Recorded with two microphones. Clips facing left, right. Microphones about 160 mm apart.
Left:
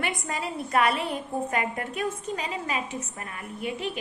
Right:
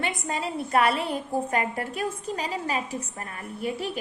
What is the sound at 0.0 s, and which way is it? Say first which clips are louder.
A woman's voice: right 1 dB; 25° right (ahead or behind).